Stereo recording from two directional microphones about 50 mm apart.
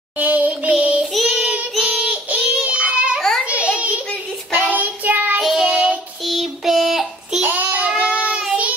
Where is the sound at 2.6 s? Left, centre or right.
Centre.